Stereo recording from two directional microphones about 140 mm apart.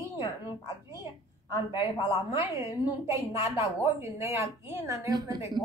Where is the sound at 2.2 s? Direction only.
20° right (ahead or behind).